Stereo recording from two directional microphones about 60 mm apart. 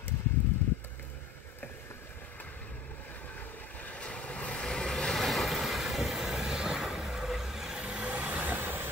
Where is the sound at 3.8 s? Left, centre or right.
Centre.